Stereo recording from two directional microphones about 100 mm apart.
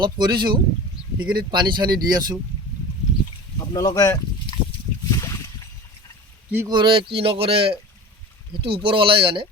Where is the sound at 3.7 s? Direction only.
35° left (ahead or behind).